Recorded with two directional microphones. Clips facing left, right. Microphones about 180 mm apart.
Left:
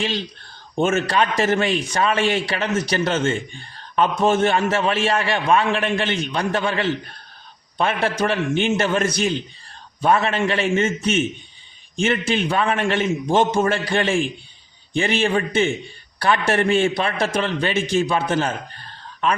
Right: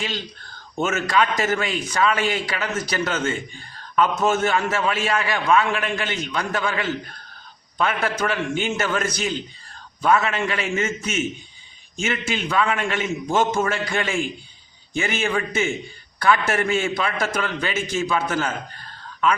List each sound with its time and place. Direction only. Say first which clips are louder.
0.8 s a man's voice: left 2 dB; 30° left (ahead or behind)
8.0 s a man's voice: left 3 dB; 30° left (ahead or behind)
12.1 s a man's voice: even; 30° left (ahead or behind)